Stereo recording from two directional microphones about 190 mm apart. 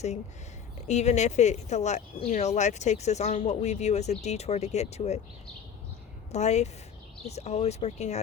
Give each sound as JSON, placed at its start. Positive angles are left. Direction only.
{"t": 0.8, "sound": "speech", "side_deg": 35}
{"t": 6.3, "sound": "speech", "side_deg": 35}